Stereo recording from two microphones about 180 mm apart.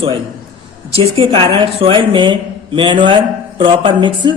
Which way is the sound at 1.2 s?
30° right (ahead or behind).